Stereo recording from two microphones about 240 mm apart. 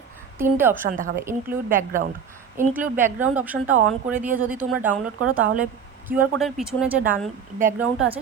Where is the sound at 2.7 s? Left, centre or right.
Centre.